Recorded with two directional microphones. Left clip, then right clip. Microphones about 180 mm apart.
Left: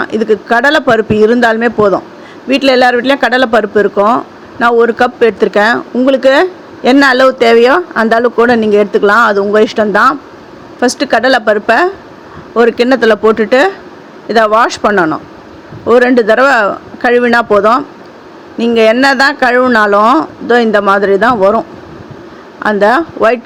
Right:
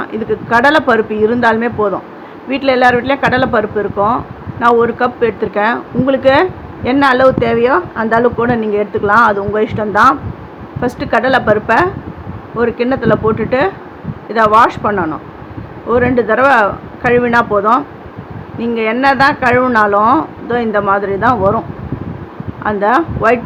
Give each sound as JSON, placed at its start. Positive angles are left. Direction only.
{"t": 0.0, "sound": "speech", "side_deg": 40}
{"t": 22.6, "sound": "speech", "side_deg": 40}